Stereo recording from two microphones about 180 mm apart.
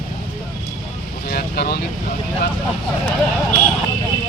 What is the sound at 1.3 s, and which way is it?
Speech, 60° left (ahead or behind).